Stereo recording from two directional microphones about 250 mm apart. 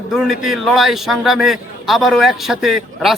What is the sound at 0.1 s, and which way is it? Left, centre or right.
A man's voice, centre.